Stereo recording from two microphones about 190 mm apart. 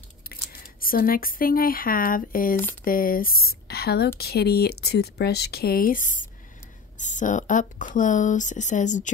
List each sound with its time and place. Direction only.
0.3 s speech: 50° left (ahead or behind)